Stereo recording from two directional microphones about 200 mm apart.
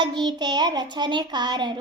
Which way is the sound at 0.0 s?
20° right (ahead or behind).